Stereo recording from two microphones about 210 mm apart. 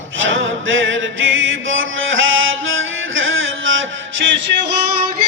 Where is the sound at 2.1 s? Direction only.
70° right (ahead or behind).